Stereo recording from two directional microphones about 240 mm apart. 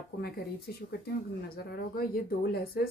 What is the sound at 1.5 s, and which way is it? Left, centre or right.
A woman's voice, left.